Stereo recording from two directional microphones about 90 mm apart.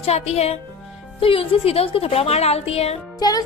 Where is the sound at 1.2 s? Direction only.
90° left.